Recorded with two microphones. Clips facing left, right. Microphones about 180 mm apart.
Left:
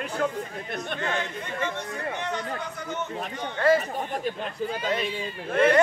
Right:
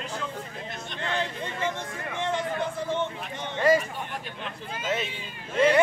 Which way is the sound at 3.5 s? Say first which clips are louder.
Even; 15° right (ahead or behind).